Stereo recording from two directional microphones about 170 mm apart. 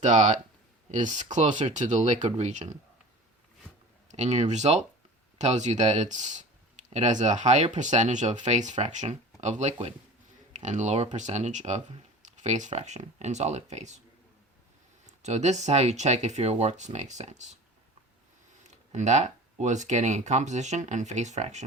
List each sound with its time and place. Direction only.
0.0 s speech: 45° right (ahead or behind)
4.1 s speech: 40° right (ahead or behind)
15.0 s speech: 40° right (ahead or behind)
18.7 s speech: 45° right (ahead or behind)